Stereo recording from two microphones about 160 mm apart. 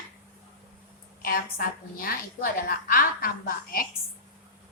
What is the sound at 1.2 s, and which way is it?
A woman's voice, 65° left (ahead or behind).